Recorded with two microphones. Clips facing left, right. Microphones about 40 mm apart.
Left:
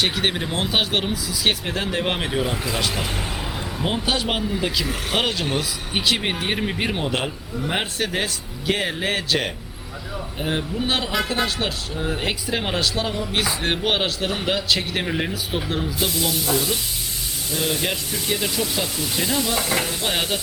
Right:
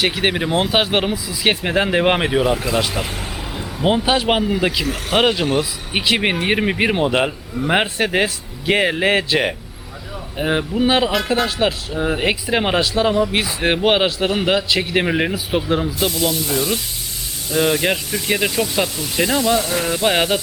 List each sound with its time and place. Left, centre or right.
0.0 s speech: centre
2.6 s speech: centre; by 10.8 s right
10.8 s speech: centre
11.9 s speech: centre
15.0 s speech: right
16.0 s speech: centre
17.5 s speech: right
19.5 s speech: centre
19.8 s speech: right